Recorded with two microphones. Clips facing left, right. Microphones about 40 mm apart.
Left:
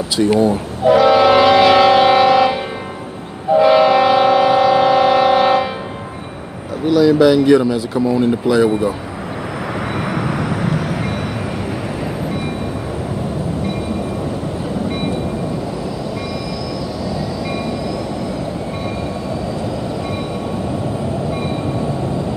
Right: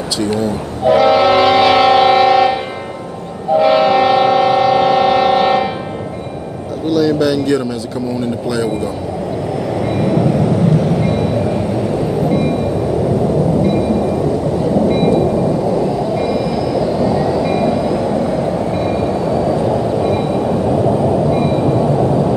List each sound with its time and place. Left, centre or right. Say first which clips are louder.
0.8 s train: even; centre
6.9 s speech: left 3 dB; centre
9.8 s vehicle: right 6 dB; left
10.9 s vehicle: right 6 dB; centre
12.3 s train: right 8 dB; centre
14.9 s vehicle: right 9 dB; centre
16.2 s train: right 8 dB; centre
17.5 s train: right 7 dB; centre
21.3 s train: right 7 dB; centre